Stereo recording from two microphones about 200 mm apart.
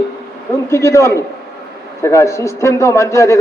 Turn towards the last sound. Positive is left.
turn(degrees=15)  # may be behind; listen again after turning